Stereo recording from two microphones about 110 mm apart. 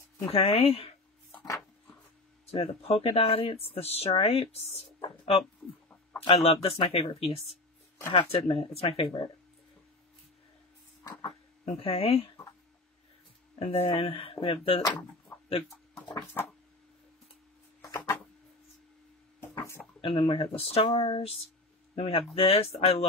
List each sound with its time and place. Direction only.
0.3 s speech: 60° left (ahead or behind)
2.4 s speech: 60° left (ahead or behind); by 9.3 s 45° left (ahead or behind)
11.6 s speech: 60° left (ahead or behind)
13.6 s speech: 65° left (ahead or behind); by 14.8 s 50° left (ahead or behind)
17.8 s a sound: 35° left (ahead or behind)
19.5 s a sound: 20° left (ahead or behind)
20.0 s speech: 55° left (ahead or behind); by 23.0 s 70° left (ahead or behind)